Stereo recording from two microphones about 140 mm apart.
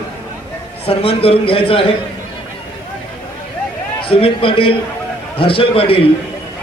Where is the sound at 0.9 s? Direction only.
40° left (ahead or behind).